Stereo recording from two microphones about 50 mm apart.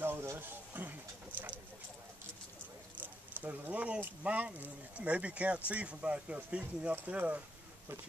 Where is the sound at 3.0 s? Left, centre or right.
Right.